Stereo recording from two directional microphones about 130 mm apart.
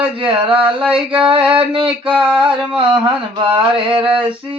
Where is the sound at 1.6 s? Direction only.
45° right (ahead or behind).